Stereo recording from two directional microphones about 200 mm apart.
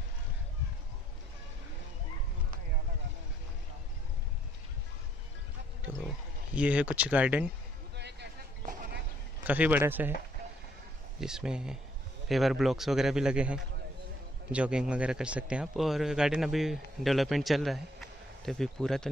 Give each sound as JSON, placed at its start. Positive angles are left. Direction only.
{"t": 5.9, "sound": "speech", "side_deg": -5}
{"t": 7.9, "sound": "a sound", "side_deg": -55}
{"t": 9.5, "sound": "speech", "side_deg": -10}
{"t": 11.1, "sound": "a man's voice", "side_deg": -5}